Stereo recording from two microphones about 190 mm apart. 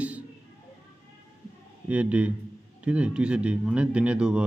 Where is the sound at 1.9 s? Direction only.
5° right (ahead or behind).